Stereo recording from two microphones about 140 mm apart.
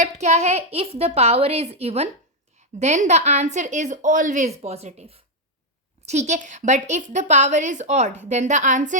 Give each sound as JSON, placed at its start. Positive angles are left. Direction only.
{"t": 0.0, "sound": "a child's voice", "side_deg": -55}